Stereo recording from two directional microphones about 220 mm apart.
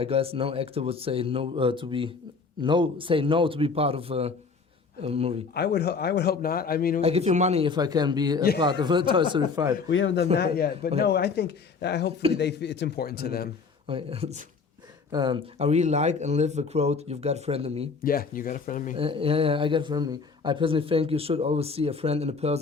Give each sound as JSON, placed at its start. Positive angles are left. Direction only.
{"t": 0.0, "sound": "speech", "side_deg": -25}
{"t": 5.5, "sound": "a man's voice", "side_deg": 45}
{"t": 7.0, "sound": "speech", "side_deg": -30}
{"t": 9.9, "sound": "a man's voice", "side_deg": 60}
{"t": 10.3, "sound": "a man's voice", "side_deg": 45}
{"t": 13.8, "sound": "speech", "side_deg": -25}
{"t": 18.0, "sound": "speech", "side_deg": 40}
{"t": 18.9, "sound": "speech", "side_deg": -25}